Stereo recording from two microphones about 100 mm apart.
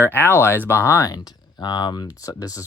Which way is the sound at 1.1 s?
45° left (ahead or behind).